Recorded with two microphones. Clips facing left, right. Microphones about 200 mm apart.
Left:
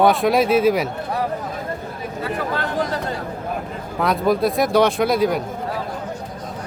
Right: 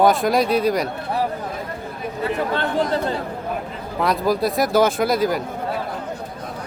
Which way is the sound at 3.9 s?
Centre (ahead or behind).